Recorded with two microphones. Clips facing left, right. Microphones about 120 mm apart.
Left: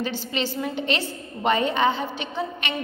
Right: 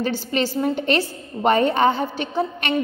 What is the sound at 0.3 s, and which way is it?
A woman's voice, 40° right (ahead or behind).